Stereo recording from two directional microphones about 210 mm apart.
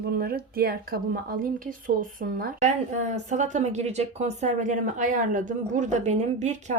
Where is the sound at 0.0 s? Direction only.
45° right (ahead or behind).